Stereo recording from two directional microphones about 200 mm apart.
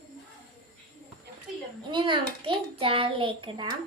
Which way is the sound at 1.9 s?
25° right (ahead or behind).